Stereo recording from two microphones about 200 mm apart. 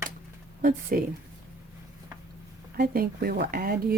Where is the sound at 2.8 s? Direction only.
50° right (ahead or behind).